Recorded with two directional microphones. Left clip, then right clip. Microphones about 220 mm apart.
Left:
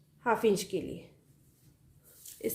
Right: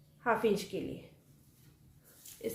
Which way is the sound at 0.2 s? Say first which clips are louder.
Left 3 dB; 40° left (ahead or behind).